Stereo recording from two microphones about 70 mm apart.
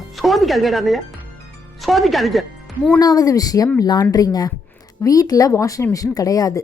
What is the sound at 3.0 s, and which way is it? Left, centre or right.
Speech, left.